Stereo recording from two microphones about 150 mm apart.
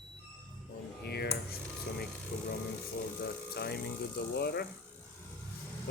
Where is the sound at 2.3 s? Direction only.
70° left (ahead or behind).